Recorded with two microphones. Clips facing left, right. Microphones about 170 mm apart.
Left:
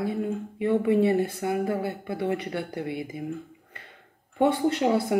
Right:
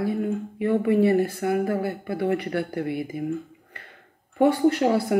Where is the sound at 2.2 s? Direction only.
60° right (ahead or behind).